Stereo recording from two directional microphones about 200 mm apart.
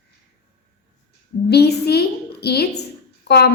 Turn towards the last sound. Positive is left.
turn(degrees=55)  # may be behind; listen again after turning